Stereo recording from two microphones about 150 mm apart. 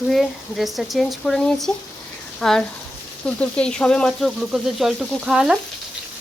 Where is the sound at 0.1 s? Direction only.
Centre (ahead or behind).